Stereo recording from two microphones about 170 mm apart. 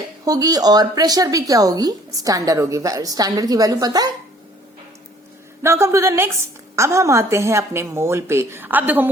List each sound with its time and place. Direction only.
0.3 s a woman's voice: 20° right (ahead or behind)
5.6 s a woman's voice: 15° right (ahead or behind)